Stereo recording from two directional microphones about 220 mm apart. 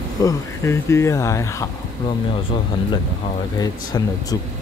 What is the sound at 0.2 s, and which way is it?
Speech, 15° left (ahead or behind).